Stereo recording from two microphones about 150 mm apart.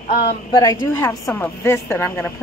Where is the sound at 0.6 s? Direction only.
25° left (ahead or behind).